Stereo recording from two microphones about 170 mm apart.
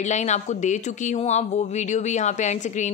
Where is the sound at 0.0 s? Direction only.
45° left (ahead or behind).